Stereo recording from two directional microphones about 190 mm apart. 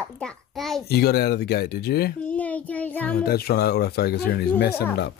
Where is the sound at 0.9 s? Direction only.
55° left (ahead or behind).